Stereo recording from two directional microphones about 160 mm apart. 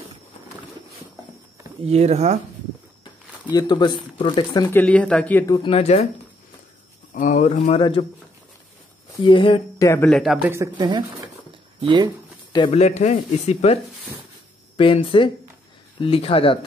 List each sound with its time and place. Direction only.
1.9 s speech: 40° right (ahead or behind)
3.5 s speech: 30° left (ahead or behind)
4.6 s speech: 10° left (ahead or behind)
5.5 s speech: 35° left (ahead or behind)
7.2 s speech: 50° left (ahead or behind)
9.3 s speech: 30° left (ahead or behind)
9.8 s speech: 15° left (ahead or behind)
10.1 s a man's voice: centre (ahead or behind)
10.7 s speech: 30° right (ahead or behind)
12.7 s speech: 45° left (ahead or behind)
14.8 s speech: 35° left (ahead or behind)